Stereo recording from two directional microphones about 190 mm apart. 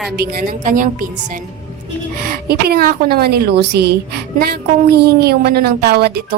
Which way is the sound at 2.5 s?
55° right (ahead or behind).